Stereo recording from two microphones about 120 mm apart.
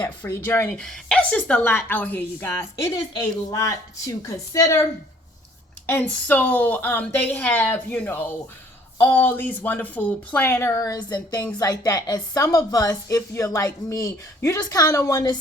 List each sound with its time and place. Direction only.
0.0 s a woman's voice: 15° left (ahead or behind)
0.7 s a woman's voice: 10° left (ahead or behind); by 15.4 s 30° left (ahead or behind)